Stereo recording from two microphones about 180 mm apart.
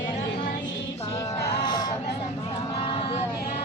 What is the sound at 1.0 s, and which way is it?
Music, 20° left (ahead or behind).